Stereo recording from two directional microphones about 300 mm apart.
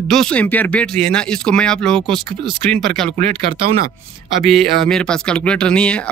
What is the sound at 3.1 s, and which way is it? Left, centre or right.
Speech, right.